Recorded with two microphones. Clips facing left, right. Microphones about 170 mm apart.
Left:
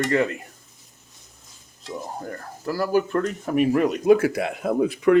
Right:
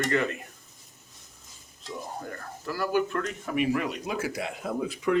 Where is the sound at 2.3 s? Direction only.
35° left (ahead or behind); by 5.2 s 60° left (ahead or behind).